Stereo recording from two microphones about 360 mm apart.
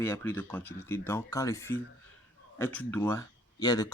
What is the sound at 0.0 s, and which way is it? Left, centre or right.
Speech, centre.